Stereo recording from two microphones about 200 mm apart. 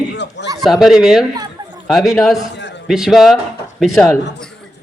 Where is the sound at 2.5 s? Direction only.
60° left (ahead or behind).